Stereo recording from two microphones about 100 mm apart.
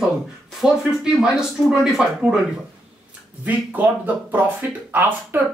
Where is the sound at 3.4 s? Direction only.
15° right (ahead or behind).